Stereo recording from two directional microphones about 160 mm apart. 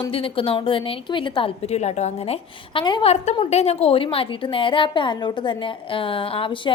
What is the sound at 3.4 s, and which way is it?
A woman's voice, 40° left (ahead or behind).